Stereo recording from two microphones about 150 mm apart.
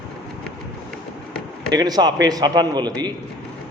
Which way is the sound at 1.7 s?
25° right (ahead or behind).